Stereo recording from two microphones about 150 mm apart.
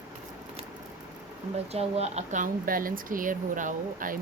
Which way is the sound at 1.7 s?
45° right (ahead or behind).